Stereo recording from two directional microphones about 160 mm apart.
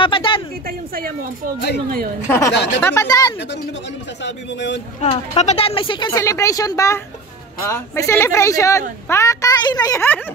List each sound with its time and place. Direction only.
0.0 s a sound: 30° left (ahead or behind)
0.7 s a sound: 65° right (ahead or behind)
2.2 s speech: 15° left (ahead or behind)
2.5 s a man's voice: 90° left
2.8 s speech: 20° left (ahead or behind)
4.2 s a man's voice: 90° left
5.0 s speech: 45° left (ahead or behind); by 10.0 s 25° left (ahead or behind)